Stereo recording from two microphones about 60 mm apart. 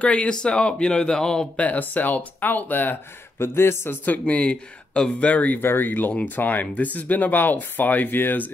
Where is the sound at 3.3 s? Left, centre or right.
Left.